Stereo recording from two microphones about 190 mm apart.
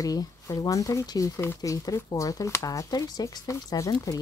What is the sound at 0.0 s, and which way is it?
Speech, 20° left (ahead or behind).